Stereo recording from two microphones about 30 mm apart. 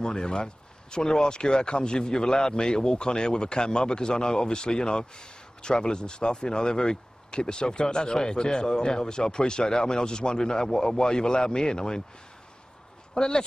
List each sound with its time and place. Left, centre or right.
0.0 s speech: left
13.1 s speech: left